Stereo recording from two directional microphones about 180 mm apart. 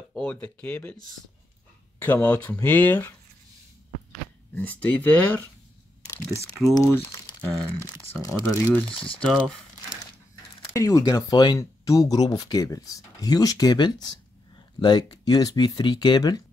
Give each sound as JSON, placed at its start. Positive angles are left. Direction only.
{"t": 0.1, "sound": "speech", "side_deg": 5}
{"t": 2.0, "sound": "speech", "side_deg": 10}
{"t": 4.6, "sound": "speech", "side_deg": 10}
{"t": 6.7, "sound": "speech", "side_deg": 20}
{"t": 9.2, "sound": "speech", "side_deg": 0}
{"t": 10.7, "sound": "speech", "side_deg": 20}